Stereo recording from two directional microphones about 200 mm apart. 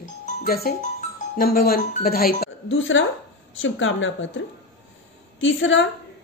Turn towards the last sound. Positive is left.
turn(degrees=70)  # may be behind; listen again after turning